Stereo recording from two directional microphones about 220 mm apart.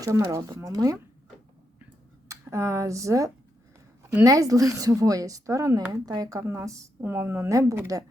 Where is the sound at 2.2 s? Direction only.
15° right (ahead or behind).